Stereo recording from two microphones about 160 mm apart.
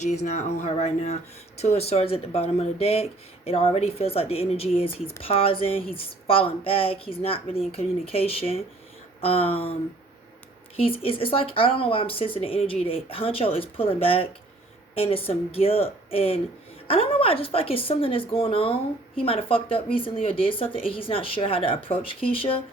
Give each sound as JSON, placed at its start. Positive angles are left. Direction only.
{"t": 0.0, "sound": "a woman's voice", "side_deg": 45}
{"t": 10.8, "sound": "a woman's voice", "side_deg": 35}